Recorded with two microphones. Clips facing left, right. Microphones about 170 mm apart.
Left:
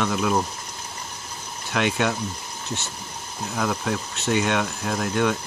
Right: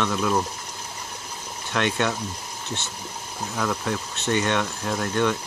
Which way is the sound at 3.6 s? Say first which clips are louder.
Left 1 dB; 10° left (ahead or behind).